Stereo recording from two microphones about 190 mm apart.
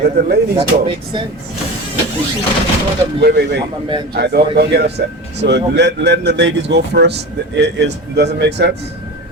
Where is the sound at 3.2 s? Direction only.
60° right (ahead or behind).